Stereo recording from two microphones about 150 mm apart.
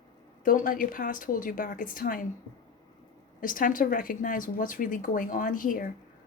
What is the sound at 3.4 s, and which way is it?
A woman's voice, 65° left (ahead or behind).